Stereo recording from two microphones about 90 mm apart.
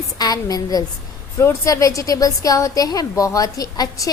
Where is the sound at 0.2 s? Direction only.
45° left (ahead or behind).